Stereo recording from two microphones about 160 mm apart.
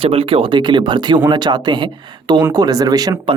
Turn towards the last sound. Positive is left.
turn(degrees=-25)  # may be behind; listen again after turning